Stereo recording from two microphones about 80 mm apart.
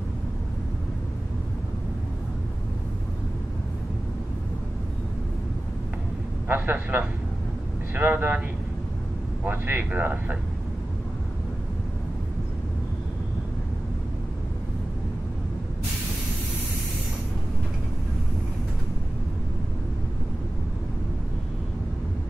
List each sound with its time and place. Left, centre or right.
6.4 s speech: right
9.4 s speech: right